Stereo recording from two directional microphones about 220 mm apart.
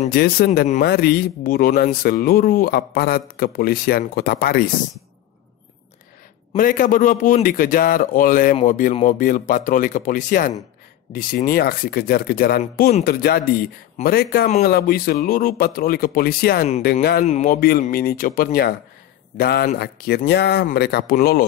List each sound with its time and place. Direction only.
0.1 s a man's voice: 45° left (ahead or behind)
6.5 s a man's voice: 40° left (ahead or behind)